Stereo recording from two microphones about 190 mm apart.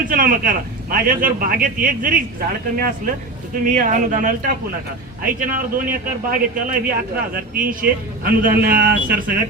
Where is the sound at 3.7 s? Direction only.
45° right (ahead or behind).